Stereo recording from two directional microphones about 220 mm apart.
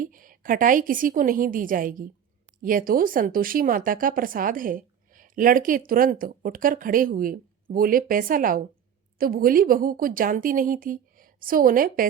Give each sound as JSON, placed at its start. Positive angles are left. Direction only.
{"t": 0.0, "sound": "speech", "side_deg": -40}